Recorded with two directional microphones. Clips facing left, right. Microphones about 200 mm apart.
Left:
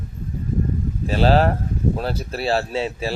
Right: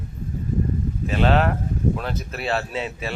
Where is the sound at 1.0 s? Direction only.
35° left (ahead or behind).